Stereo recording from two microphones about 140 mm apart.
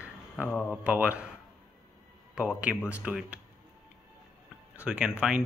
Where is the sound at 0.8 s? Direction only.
10° right (ahead or behind).